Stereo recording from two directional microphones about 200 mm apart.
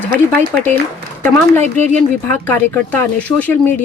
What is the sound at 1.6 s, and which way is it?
Speech, 35° right (ahead or behind).